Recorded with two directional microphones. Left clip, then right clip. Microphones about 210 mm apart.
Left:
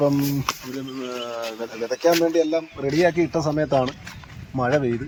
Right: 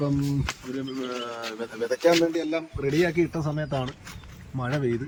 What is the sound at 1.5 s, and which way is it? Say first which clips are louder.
Speech: left 1 dB; 45° left (ahead or behind).